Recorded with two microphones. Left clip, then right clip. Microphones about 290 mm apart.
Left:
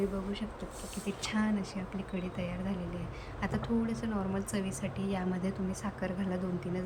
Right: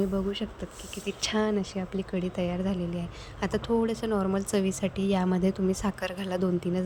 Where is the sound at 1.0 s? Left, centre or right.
Centre.